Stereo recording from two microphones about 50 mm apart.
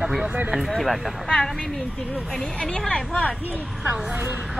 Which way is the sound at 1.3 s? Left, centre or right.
Centre.